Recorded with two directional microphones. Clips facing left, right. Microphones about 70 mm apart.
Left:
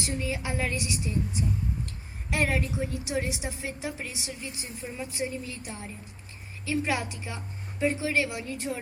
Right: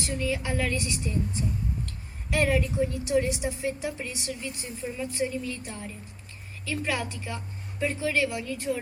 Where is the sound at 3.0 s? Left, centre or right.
Left.